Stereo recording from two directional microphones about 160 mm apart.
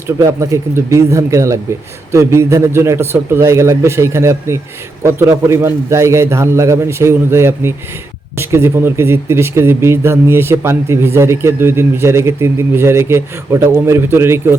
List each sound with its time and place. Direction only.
0.2 s speech: 20° right (ahead or behind)